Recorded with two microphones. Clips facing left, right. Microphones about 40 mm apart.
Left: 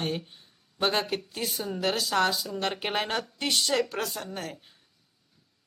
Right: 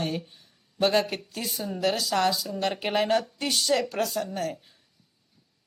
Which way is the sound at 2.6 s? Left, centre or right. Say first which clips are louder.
Right 3 dB; centre.